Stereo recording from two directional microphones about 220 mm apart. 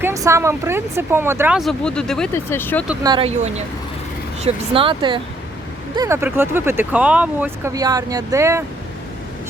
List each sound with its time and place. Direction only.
0.0 s speech: 15° right (ahead or behind); by 2.8 s 10° left (ahead or behind)
3.0 s speech: 20° right (ahead or behind)
6.0 s speech: 10° right (ahead or behind)